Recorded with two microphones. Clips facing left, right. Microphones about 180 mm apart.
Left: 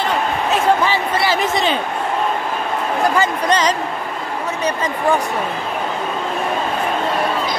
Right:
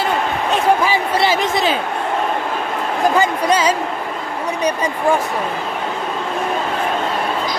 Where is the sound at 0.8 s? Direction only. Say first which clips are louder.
Right 1 dB; 10° right (ahead or behind).